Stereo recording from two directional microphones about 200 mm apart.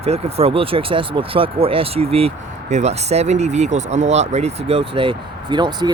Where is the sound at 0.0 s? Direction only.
30° right (ahead or behind).